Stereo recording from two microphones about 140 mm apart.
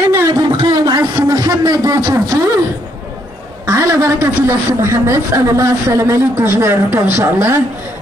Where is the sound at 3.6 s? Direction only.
20° right (ahead or behind).